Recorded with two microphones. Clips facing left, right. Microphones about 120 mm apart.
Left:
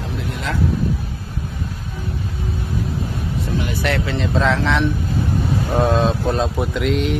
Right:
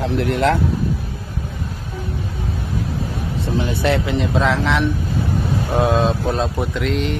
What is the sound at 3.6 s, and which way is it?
Speech, 25° right (ahead or behind).